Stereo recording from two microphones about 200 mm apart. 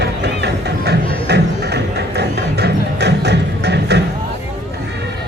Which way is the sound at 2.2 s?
55° right (ahead or behind).